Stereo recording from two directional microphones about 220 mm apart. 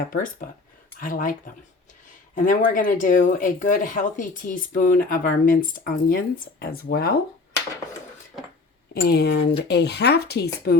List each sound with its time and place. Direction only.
0.9 s speech: 40° left (ahead or behind)
2.4 s speech: 40° left (ahead or behind)
8.9 s speech: 45° left (ahead or behind)